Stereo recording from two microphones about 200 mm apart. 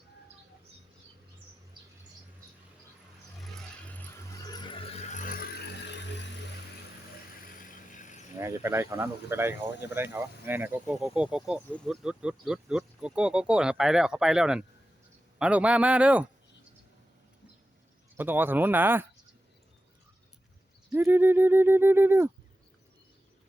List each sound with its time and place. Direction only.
4.5 s vehicle: 25° left (ahead or behind); by 6.2 s 60° left (ahead or behind)
7.4 s vehicle: 40° left (ahead or behind)
8.4 s speech: 15° right (ahead or behind)
18.2 s speech: 10° right (ahead or behind)
20.9 s speech: 10° right (ahead or behind)